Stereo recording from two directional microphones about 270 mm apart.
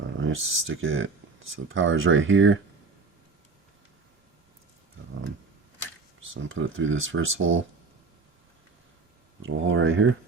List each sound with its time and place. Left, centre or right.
0.0 s speech: right
6.2 s speech: right
9.6 s speech: right